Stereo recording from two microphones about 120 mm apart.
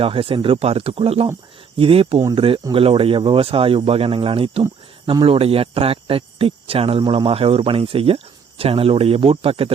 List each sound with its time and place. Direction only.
0.0 s speech: 50° right (ahead or behind)